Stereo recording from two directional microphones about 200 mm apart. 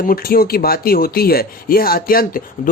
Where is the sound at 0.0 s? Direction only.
45° left (ahead or behind).